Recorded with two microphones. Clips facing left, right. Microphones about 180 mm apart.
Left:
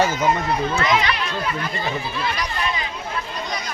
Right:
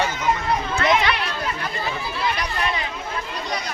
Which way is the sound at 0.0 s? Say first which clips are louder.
Left 4 dB; 45° left (ahead or behind).